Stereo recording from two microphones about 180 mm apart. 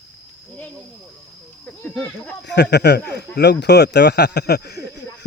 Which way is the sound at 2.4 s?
70° left (ahead or behind).